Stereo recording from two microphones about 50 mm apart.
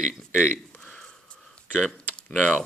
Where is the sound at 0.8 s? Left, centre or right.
Centre.